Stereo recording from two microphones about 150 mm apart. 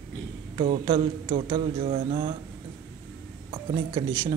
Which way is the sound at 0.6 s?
35° right (ahead or behind).